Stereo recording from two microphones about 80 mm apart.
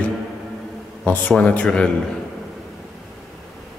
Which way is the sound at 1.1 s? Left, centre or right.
Centre.